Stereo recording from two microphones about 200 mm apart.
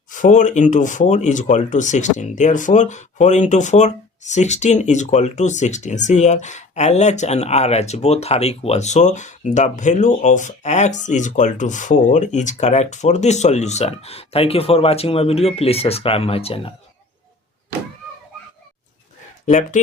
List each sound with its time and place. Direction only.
0.1 s speech: 40° left (ahead or behind)
19.5 s speech: 40° left (ahead or behind)